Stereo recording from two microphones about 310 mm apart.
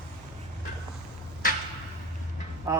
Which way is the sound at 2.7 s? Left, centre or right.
Centre.